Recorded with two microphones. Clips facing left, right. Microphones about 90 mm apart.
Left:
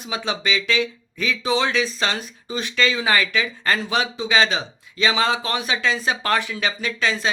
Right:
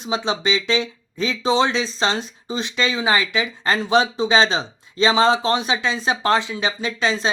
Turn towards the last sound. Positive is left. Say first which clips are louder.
# right 2 dB
turn(degrees=-25)  # may be behind; listen again after turning